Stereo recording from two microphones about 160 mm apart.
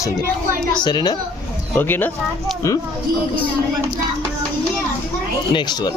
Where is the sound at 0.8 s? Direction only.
25° left (ahead or behind).